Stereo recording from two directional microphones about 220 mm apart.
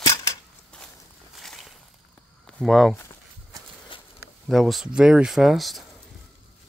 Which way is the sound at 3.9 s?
25° left (ahead or behind).